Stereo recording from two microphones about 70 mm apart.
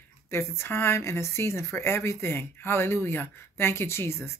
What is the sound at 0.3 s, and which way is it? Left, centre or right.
Speech, left.